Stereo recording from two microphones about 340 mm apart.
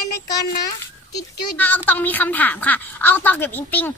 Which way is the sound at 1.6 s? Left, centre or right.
Centre.